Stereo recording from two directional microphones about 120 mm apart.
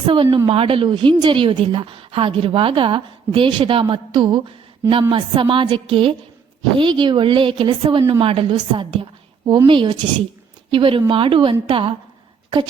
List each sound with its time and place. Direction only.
0.0 s a woman's voice: 45° right (ahead or behind)